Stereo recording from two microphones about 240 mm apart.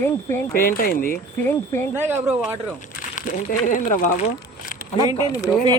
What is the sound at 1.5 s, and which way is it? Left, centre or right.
Speech, centre.